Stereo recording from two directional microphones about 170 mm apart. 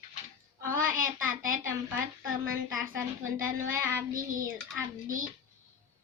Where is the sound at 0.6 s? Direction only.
55° right (ahead or behind).